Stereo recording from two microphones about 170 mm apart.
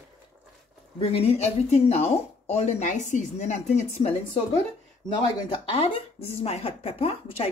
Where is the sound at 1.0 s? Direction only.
35° left (ahead or behind).